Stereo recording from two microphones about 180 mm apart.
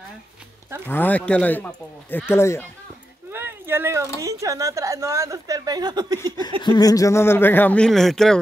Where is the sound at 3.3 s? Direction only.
10° right (ahead or behind).